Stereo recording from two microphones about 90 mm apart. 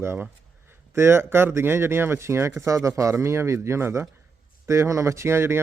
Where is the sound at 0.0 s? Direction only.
25° right (ahead or behind).